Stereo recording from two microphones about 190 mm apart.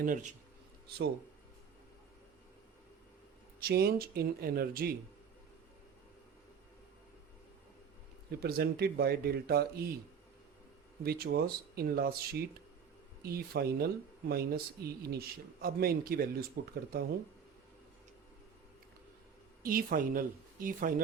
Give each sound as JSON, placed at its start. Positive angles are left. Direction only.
{"t": 0.0, "sound": "speech", "side_deg": -45}
{"t": 3.6, "sound": "speech", "side_deg": -55}
{"t": 8.3, "sound": "speech", "side_deg": -55}
{"t": 11.0, "sound": "speech", "side_deg": -55}
{"t": 19.6, "sound": "speech", "side_deg": -50}